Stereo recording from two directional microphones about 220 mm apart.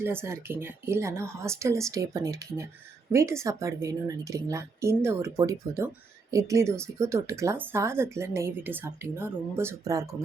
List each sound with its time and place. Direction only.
0.0 s speech: 10° right (ahead or behind)